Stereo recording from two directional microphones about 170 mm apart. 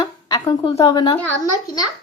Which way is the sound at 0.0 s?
20° left (ahead or behind).